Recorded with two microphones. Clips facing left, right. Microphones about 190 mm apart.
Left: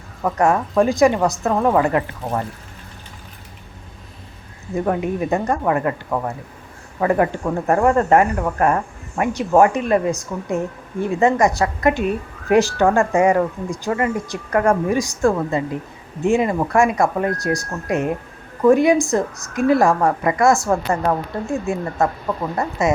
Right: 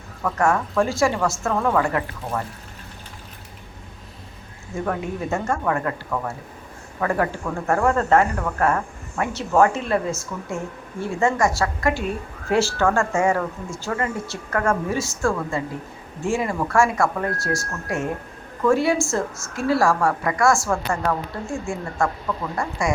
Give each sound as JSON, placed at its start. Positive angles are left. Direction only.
{"t": 0.2, "sound": "a woman's voice", "side_deg": 20}
{"t": 4.7, "sound": "a woman's voice", "side_deg": 20}